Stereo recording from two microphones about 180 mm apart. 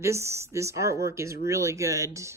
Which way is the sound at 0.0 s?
15° right (ahead or behind).